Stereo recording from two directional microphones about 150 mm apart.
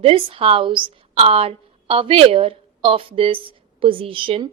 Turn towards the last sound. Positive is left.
turn(degrees=-35)  # may be behind; listen again after turning